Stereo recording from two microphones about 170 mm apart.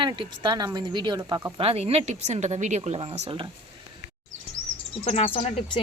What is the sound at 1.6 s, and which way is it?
Speech, 35° right (ahead or behind).